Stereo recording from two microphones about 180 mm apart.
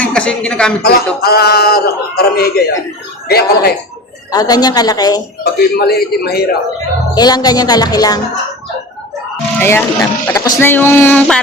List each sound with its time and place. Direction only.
0.0 s speech: 5° left (ahead or behind)
0.9 s a man's voice: 60° left (ahead or behind)
4.3 s speech: 20° left (ahead or behind)
5.4 s a man's voice: 60° left (ahead or behind)
7.2 s speech: 20° left (ahead or behind)
9.6 s speech: 15° left (ahead or behind)